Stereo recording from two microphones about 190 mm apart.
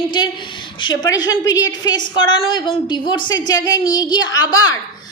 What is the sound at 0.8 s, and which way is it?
A woman's voice, 25° left (ahead or behind).